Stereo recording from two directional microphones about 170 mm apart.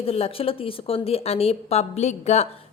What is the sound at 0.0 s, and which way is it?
A woman's voice, 35° left (ahead or behind).